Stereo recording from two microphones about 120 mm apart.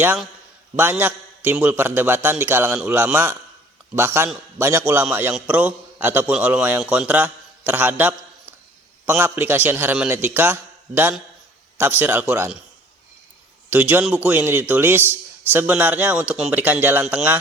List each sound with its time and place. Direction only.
0.8 s a man's voice: 15° right (ahead or behind)
13.7 s a man's voice: 15° right (ahead or behind)